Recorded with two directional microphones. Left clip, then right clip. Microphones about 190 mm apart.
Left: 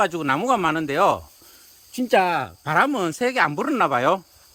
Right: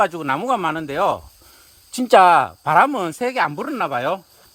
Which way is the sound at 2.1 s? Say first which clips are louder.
Right 8 dB; 60° right (ahead or behind).